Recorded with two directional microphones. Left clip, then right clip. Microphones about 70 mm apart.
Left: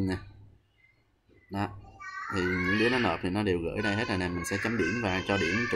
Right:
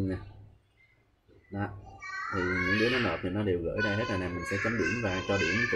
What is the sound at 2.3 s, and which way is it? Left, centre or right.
Speech, left.